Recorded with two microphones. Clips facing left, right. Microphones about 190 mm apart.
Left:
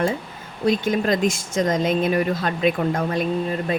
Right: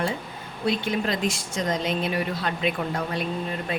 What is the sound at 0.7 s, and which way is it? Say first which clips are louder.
A woman's voice: left 6 dB; 45° left (ahead or behind).